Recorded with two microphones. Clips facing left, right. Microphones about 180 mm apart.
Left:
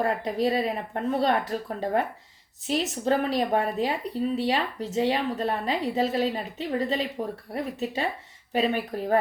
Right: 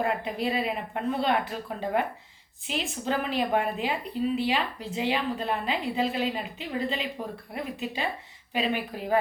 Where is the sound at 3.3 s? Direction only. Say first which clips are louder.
Left 2 dB; 35° left (ahead or behind).